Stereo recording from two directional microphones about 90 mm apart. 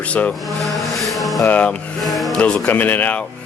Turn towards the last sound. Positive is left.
turn(degrees=20)  # may be behind; listen again after turning